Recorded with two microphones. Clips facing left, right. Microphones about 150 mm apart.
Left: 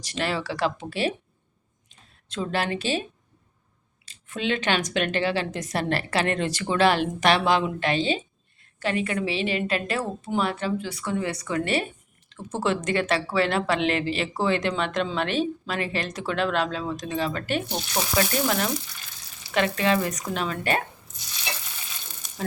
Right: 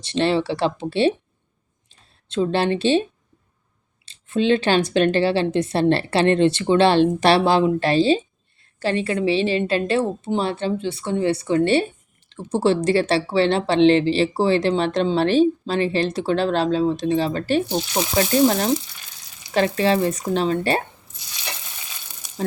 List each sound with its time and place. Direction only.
0.0 s a woman's voice: 30° right (ahead or behind)
4.0 s a woman's voice: 30° right (ahead or behind)